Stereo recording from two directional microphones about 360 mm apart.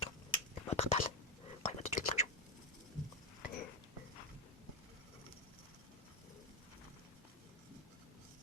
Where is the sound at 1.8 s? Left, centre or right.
Centre.